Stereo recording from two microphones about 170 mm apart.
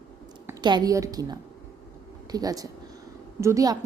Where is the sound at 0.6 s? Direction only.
25° right (ahead or behind).